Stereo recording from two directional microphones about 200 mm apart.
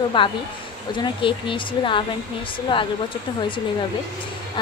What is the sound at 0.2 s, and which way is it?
A woman's voice, 25° left (ahead or behind).